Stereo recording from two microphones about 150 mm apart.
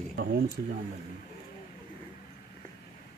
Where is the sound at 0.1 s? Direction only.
90° right.